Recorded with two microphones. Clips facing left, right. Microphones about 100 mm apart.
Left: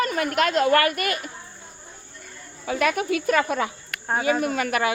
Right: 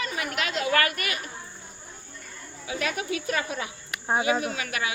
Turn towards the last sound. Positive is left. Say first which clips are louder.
# left 7 dB
turn(degrees=50)  # may be behind; listen again after turning